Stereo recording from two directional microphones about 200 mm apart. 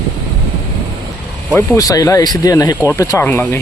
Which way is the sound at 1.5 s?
15° left (ahead or behind).